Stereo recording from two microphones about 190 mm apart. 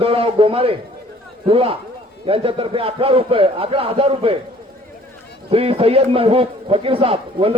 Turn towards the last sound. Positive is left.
turn(degrees=-30)  # may be behind; listen again after turning